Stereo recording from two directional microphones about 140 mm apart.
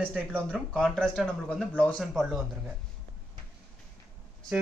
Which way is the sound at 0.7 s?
5° left (ahead or behind).